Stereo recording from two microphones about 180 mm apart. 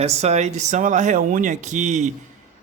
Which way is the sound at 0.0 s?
35° right (ahead or behind).